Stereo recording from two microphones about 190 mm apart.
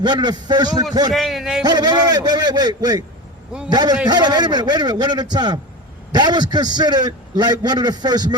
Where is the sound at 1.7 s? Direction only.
20° right (ahead or behind).